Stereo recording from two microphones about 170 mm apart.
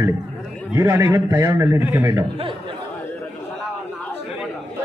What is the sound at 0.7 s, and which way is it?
A man's voice, 15° right (ahead or behind).